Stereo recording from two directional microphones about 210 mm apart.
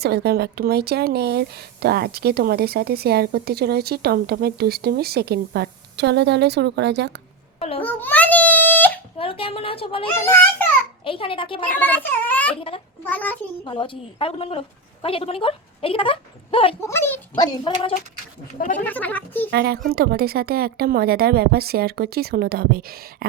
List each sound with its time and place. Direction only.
0.0 s speech: 50° right (ahead or behind)
7.8 s baby cry: 10° left (ahead or behind)
9.1 s a woman's voice: 25° left (ahead or behind)
10.2 s speech: 10° left (ahead or behind)
11.0 s a woman's voice: 25° left (ahead or behind)
11.6 s speech: 10° left (ahead or behind)
13.7 s a woman's voice: 25° left (ahead or behind)
16.8 s speech: 10° left (ahead or behind)
18.9 s speech: 10° left (ahead or behind)
19.5 s speech: 50° right (ahead or behind)